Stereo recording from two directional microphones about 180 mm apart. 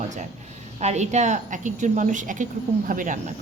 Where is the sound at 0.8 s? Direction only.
40° right (ahead or behind).